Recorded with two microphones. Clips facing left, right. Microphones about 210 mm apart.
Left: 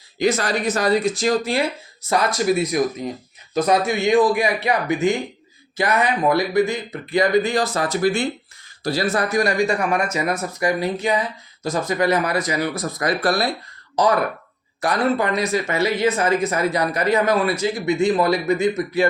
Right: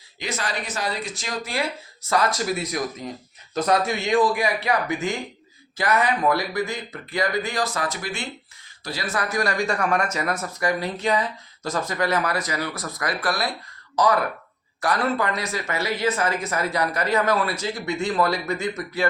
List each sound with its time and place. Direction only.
0.2 s speech: 40° left (ahead or behind)
2.0 s speech: 20° left (ahead or behind)
9.3 s speech: 20° left (ahead or behind)
14.8 s speech: 20° left (ahead or behind)